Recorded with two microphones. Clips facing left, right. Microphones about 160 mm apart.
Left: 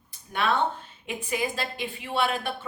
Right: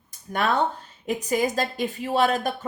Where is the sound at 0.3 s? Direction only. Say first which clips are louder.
Right 2 dB; 45° right (ahead or behind).